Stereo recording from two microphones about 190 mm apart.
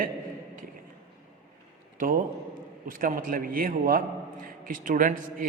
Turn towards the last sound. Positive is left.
turn(degrees=-45)  # may be behind; listen again after turning